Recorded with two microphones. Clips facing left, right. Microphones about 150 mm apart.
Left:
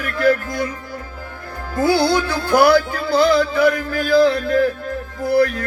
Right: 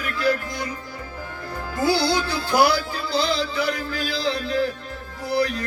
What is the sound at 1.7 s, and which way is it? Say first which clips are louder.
Music: left 5 dB; 55° left (ahead or behind).